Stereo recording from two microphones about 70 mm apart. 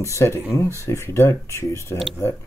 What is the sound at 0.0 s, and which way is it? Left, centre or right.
Speech, left.